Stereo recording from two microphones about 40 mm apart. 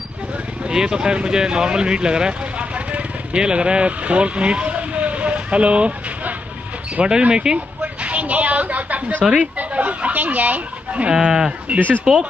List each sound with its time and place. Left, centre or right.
0.7 s speech: centre
2.6 s vehicle: right
3.3 s speech: right
7.8 s a sound: right
9.3 s speech: right
10.9 s speech: right
11.1 s speech: centre
12.1 s speech: centre